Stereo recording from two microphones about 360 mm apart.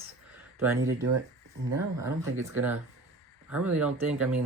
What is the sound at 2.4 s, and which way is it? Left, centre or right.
Speech, centre.